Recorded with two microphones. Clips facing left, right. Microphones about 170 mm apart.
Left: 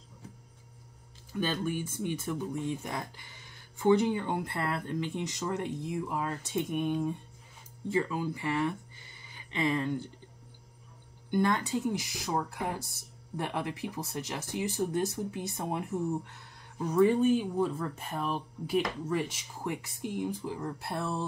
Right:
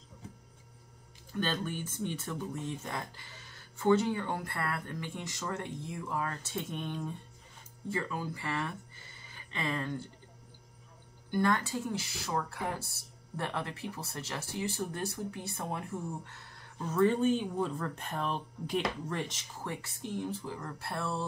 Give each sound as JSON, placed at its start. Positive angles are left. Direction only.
{"t": 1.4, "sound": "speech", "side_deg": 10}
{"t": 11.2, "sound": "speech", "side_deg": 20}